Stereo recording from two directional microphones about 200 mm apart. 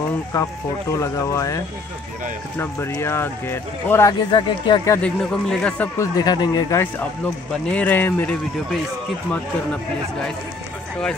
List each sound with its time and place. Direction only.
0.9 s speech: 15° left (ahead or behind)
2.6 s speech: 10° left (ahead or behind)
4.3 s speech: 25° left (ahead or behind)
5.3 s speech: 5° left (ahead or behind)
6.1 s speech: 20° left (ahead or behind)